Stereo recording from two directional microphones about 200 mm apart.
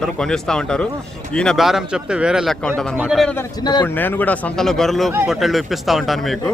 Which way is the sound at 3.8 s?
10° left (ahead or behind).